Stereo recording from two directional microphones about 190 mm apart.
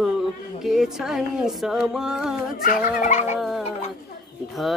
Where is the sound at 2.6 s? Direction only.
45° left (ahead or behind).